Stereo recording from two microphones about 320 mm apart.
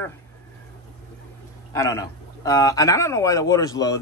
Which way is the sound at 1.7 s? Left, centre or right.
Centre.